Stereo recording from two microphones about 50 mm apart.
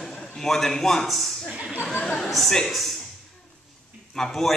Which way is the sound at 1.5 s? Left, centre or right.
Right.